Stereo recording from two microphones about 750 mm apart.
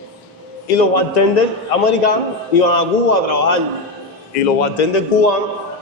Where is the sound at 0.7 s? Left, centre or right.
Left.